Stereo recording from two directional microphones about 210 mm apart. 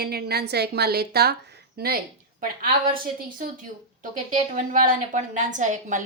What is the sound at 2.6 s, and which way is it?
Speech, 45° right (ahead or behind).